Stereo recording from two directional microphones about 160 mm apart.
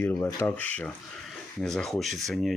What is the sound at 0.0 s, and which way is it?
Speech, 15° left (ahead or behind).